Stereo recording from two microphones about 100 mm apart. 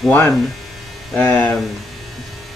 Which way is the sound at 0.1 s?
20° left (ahead or behind).